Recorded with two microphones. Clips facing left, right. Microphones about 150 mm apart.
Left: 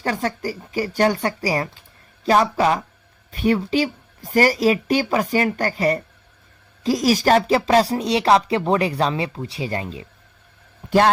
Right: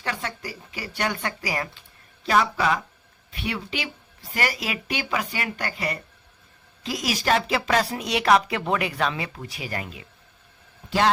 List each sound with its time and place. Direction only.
0.0 s a woman's voice: 40° left (ahead or behind)